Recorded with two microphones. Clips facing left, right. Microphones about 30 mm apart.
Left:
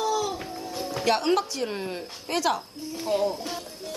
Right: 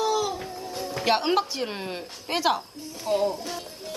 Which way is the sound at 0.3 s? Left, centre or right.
Centre.